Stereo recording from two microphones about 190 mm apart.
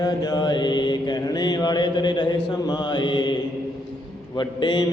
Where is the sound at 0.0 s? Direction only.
20° left (ahead or behind).